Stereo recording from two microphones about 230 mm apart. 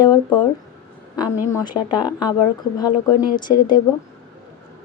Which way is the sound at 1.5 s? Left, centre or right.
Centre.